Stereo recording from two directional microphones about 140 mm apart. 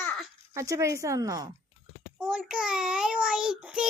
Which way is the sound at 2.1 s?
5° right (ahead or behind).